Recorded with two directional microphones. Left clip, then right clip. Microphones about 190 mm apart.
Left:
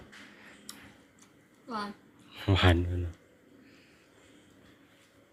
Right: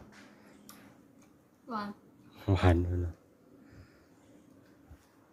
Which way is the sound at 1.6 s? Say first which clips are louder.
Left 1 dB; centre (ahead or behind).